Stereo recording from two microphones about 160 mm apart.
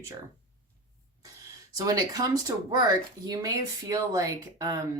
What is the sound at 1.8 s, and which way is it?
Speech, 20° right (ahead or behind).